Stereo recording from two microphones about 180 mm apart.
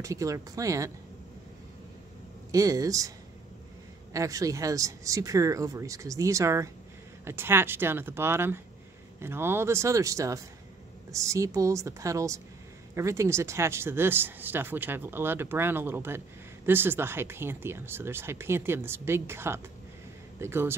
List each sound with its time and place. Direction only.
0.0 s speech: 15° right (ahead or behind)
2.5 s speech: 20° right (ahead or behind)
4.1 s speech: 15° right (ahead or behind)